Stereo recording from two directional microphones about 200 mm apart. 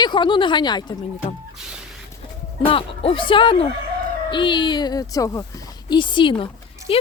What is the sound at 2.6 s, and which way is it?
Speech, 25° left (ahead or behind).